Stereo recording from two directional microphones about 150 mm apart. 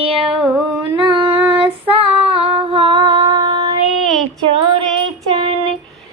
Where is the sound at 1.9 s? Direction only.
40° right (ahead or behind).